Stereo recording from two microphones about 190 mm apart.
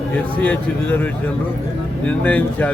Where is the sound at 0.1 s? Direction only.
5° left (ahead or behind).